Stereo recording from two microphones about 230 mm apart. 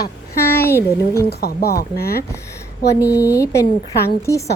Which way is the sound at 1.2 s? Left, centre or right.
Left.